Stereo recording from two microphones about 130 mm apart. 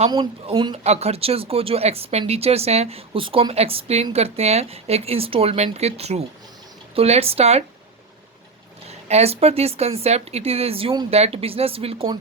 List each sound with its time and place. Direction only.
0.1 s speech: 40° right (ahead or behind)
0.9 s speech: 55° right (ahead or behind)
8.9 s speech: 55° right (ahead or behind)